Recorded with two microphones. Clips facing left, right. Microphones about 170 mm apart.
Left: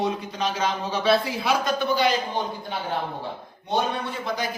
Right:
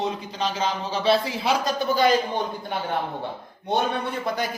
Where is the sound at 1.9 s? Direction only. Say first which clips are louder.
Right 3 dB; 45° right (ahead or behind).